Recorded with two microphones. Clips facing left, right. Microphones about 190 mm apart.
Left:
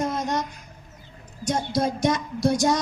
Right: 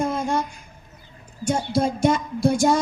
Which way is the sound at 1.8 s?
10° right (ahead or behind).